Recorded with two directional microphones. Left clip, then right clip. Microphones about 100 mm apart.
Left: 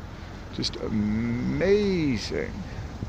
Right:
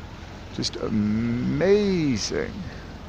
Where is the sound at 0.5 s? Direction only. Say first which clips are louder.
Right 1 dB; 50° right (ahead or behind).